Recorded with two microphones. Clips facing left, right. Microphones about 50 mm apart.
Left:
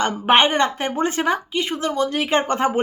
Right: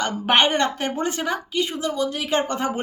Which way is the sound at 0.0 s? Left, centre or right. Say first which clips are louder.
Left 3 dB; left.